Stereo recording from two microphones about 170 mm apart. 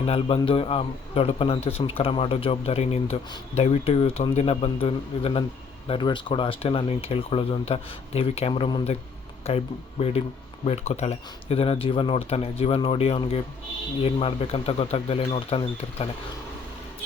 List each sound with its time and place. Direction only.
0.0 s speech: 35° left (ahead or behind)